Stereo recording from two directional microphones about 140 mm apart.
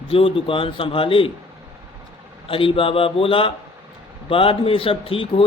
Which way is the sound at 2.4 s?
40° left (ahead or behind).